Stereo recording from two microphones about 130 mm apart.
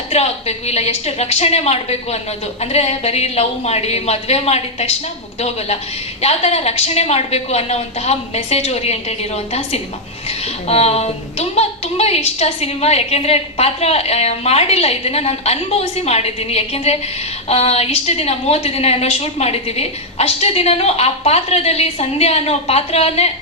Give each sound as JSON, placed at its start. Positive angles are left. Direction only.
{"t": 0.1, "sound": "a woman's voice", "side_deg": 55}